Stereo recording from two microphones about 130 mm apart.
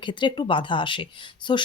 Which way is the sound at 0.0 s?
35° left (ahead or behind).